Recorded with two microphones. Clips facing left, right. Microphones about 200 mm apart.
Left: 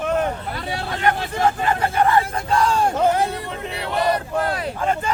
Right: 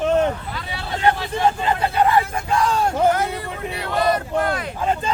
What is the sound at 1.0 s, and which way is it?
Hubbub, 20° right (ahead or behind).